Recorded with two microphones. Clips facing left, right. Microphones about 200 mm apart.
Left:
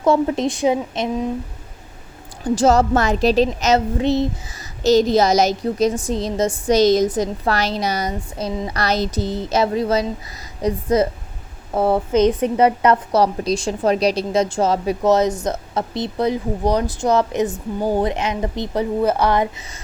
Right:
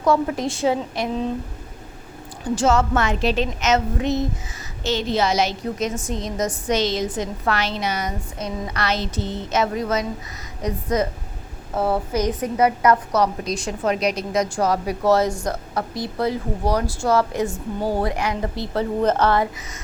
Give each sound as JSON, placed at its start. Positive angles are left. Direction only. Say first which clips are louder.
{"t": 0.0, "sound": "a woman's voice", "louder": "left 3 dB", "side_deg": 25}
{"t": 2.6, "sound": "a woman's voice", "louder": "left 4 dB", "side_deg": 35}